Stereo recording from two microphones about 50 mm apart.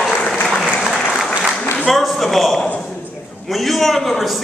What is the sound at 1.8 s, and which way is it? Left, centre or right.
A man's voice, centre.